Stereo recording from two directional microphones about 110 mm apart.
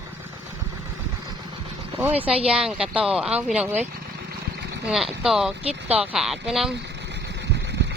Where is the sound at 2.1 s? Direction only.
15° right (ahead or behind).